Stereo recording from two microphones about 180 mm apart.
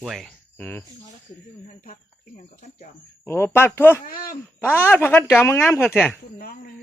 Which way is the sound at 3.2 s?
15° left (ahead or behind).